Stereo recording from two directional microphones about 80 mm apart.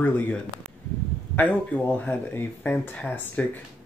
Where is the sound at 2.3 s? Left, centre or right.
Left.